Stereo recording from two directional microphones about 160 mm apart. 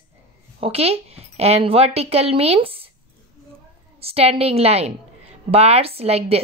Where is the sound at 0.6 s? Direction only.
40° right (ahead or behind).